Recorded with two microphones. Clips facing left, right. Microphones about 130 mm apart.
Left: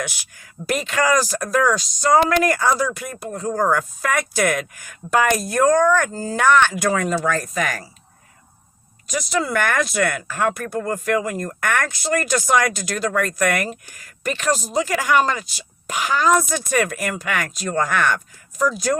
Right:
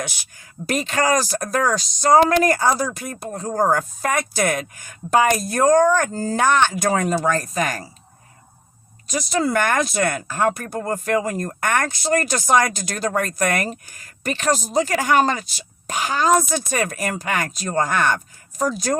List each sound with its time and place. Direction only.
0.7 s speech: 30° right (ahead or behind)
6.8 s speech: 40° right (ahead or behind)
9.3 s speech: 35° right (ahead or behind)
15.5 s speech: 30° right (ahead or behind)